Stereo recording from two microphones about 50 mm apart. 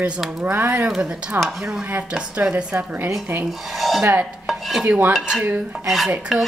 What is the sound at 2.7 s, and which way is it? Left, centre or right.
Speech, right.